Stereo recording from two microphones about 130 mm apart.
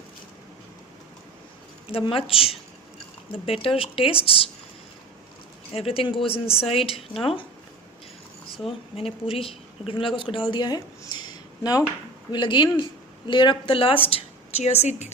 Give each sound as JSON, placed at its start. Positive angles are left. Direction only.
{"t": 1.9, "sound": "speech", "side_deg": 45}
{"t": 5.7, "sound": "speech", "side_deg": 50}
{"t": 9.0, "sound": "speech", "side_deg": 45}